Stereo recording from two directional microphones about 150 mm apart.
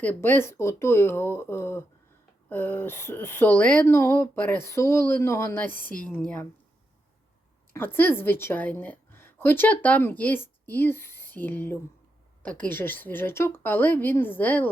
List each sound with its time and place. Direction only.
0.0 s speech: 10° left (ahead or behind)
7.7 s a woman's voice: 15° left (ahead or behind)